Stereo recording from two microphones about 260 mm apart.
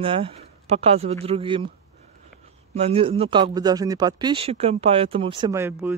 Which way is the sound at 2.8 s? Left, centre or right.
Right.